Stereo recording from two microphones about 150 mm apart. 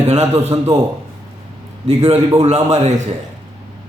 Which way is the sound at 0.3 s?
25° right (ahead or behind).